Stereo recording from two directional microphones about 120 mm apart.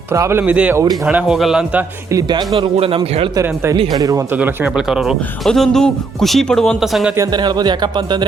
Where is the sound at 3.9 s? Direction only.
30° right (ahead or behind).